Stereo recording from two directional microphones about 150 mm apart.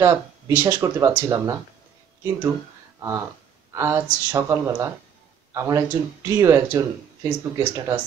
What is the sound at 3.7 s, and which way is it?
Speech, 15° right (ahead or behind).